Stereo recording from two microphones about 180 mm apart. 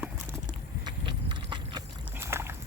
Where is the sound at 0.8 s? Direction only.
25° right (ahead or behind).